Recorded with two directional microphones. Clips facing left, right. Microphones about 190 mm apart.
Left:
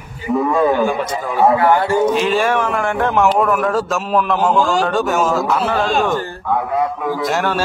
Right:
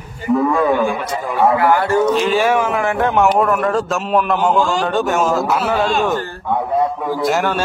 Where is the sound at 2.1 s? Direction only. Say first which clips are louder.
Right 1 dB; centre (ahead or behind).